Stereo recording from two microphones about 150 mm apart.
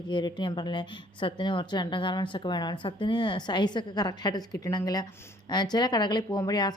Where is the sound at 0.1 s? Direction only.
30° left (ahead or behind).